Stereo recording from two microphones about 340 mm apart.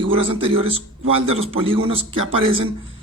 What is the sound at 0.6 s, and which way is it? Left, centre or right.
Speech, right.